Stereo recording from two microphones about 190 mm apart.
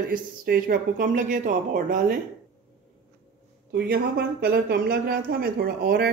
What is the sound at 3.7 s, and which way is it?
Speech, 55° right (ahead or behind).